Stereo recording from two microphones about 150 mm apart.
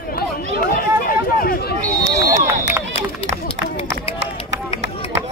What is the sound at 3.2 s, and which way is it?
Run, 40° left (ahead or behind).